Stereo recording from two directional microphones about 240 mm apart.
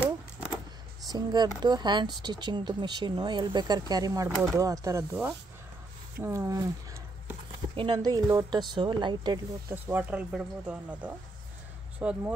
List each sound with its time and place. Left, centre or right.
1.0 s speech: centre